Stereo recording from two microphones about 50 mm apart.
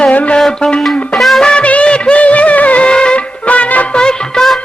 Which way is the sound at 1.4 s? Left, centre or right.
Centre.